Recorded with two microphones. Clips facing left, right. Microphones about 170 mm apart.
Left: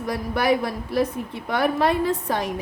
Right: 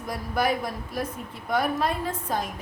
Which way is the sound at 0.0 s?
75° left (ahead or behind).